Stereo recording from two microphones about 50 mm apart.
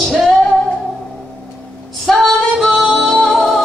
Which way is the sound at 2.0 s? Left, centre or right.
Centre.